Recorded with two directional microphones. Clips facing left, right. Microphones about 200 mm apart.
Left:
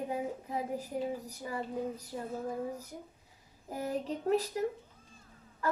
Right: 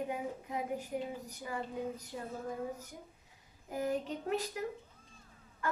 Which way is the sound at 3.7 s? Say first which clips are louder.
Even; 35° left (ahead or behind).